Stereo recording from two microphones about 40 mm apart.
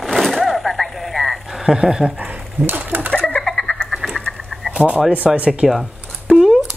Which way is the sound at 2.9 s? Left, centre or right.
Right.